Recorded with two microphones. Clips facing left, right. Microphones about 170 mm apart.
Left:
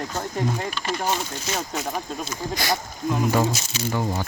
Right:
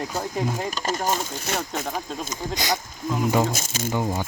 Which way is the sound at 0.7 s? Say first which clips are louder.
Right 1 dB; 40° right (ahead or behind).